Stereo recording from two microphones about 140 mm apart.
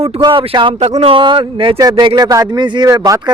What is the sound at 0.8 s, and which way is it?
A man's voice, 50° right (ahead or behind).